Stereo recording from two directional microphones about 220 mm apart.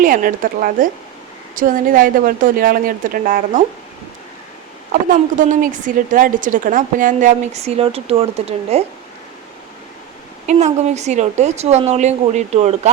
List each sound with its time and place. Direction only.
0.0 s a woman's voice: 40° right (ahead or behind)
5.1 s a woman's voice: 35° right (ahead or behind)
10.4 s a woman's voice: 30° right (ahead or behind)